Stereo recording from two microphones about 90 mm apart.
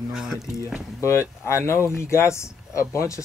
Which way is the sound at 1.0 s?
30° left (ahead or behind).